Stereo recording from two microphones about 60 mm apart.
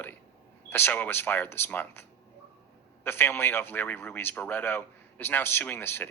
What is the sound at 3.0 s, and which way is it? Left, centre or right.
A man's voice, left.